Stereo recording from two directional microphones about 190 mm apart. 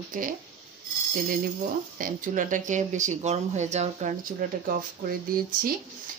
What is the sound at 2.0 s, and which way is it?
Speech, 45° right (ahead or behind).